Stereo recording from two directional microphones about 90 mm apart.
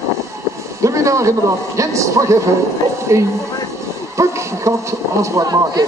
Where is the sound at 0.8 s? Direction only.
35° right (ahead or behind).